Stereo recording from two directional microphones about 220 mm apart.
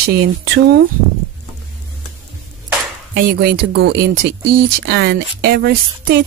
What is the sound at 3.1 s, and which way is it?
Speech, 45° right (ahead or behind).